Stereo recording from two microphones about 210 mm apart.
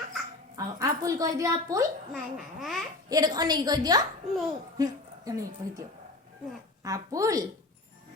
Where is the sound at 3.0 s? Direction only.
20° right (ahead or behind).